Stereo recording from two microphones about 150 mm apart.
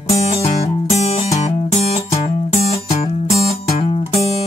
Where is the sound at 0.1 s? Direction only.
45° left (ahead or behind).